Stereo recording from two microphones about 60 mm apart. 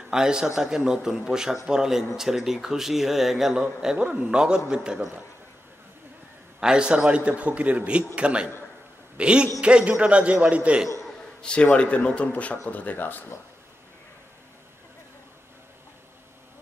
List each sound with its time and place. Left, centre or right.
0.1 s a man's voice: centre
6.6 s a man's voice: centre
11.6 s speech: centre